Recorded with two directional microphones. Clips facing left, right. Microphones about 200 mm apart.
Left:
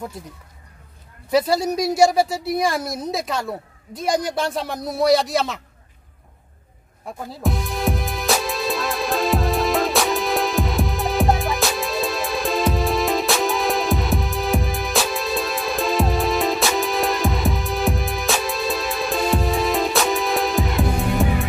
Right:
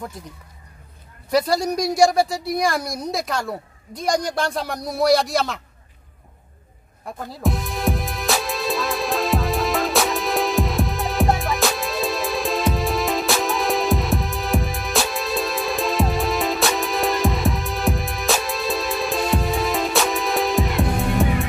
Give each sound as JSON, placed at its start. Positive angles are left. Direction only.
{"t": 1.3, "sound": "a woman's voice", "side_deg": 5}
{"t": 7.1, "sound": "music", "side_deg": 5}